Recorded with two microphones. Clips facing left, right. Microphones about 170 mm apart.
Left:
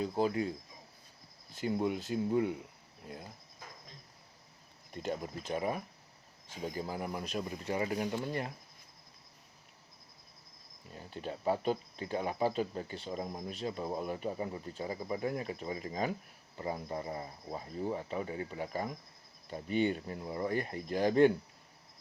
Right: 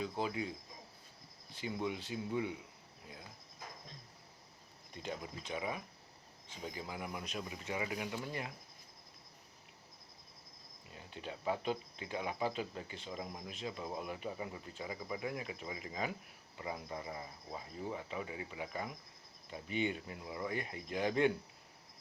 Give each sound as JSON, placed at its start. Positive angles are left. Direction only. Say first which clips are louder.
{"t": 0.0, "sound": "speech", "louder": "left 6 dB", "side_deg": 45}
{"t": 1.5, "sound": "speech", "louder": "left 6 dB", "side_deg": 50}
{"t": 5.5, "sound": "speech", "louder": "left 6 dB", "side_deg": 45}
{"t": 10.9, "sound": "speech", "louder": "left 5 dB", "side_deg": 40}